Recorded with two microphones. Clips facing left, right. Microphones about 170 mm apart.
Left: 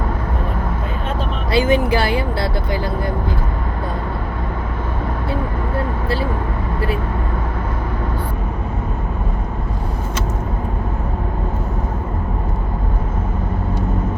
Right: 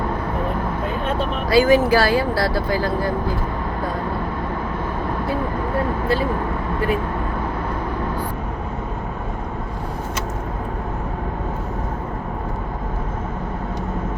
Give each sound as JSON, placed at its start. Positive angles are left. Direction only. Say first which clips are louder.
{"t": 1.5, "sound": "speech", "louder": "right 2 dB", "side_deg": 25}